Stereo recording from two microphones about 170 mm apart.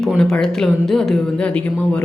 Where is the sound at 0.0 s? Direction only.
5° left (ahead or behind).